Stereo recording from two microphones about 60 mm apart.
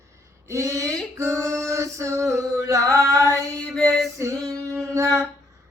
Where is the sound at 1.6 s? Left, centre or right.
Right.